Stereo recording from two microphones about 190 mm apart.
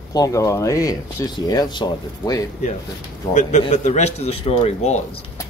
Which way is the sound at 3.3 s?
35° left (ahead or behind).